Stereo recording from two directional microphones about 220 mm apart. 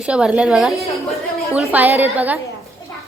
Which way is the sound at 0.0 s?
5° right (ahead or behind).